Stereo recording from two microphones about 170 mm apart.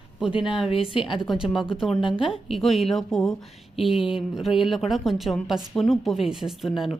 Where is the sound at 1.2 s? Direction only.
Centre (ahead or behind).